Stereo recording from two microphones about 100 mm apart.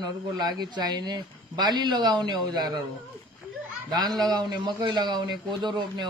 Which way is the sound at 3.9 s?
45° right (ahead or behind).